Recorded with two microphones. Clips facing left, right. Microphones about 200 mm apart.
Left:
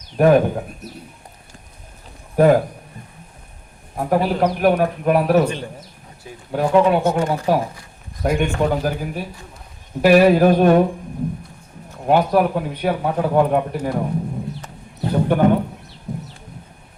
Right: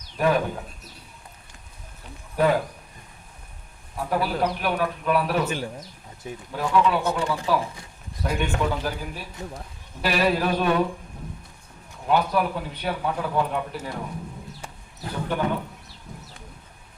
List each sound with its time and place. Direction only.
0.2 s a man's voice: 50° left (ahead or behind)
2.3 s speech: 45° left (ahead or behind)
3.9 s a man's voice: 45° left (ahead or behind)
6.5 s a man's voice: 50° left (ahead or behind)
12.0 s a man's voice: 50° left (ahead or behind)
15.1 s speech: 50° left (ahead or behind)